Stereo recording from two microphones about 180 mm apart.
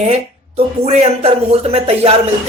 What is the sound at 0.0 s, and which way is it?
Speech, 35° right (ahead or behind).